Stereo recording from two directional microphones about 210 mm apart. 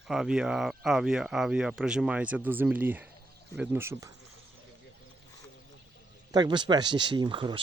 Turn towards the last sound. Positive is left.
turn(degrees=-25)  # may be behind; listen again after turning